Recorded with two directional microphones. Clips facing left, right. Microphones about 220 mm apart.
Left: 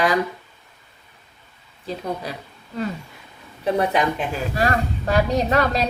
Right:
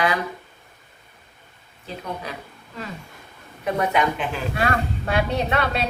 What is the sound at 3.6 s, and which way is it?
A woman's voice, 35° left (ahead or behind).